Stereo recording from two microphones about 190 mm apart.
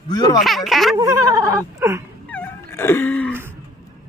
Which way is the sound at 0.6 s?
Centre (ahead or behind).